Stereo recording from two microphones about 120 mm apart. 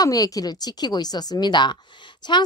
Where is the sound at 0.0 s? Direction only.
30° left (ahead or behind).